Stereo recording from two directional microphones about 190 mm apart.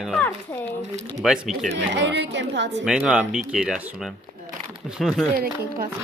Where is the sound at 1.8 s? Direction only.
70° right (ahead or behind).